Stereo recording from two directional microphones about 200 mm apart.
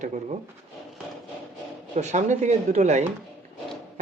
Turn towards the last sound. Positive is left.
turn(degrees=-35)  # may be behind; listen again after turning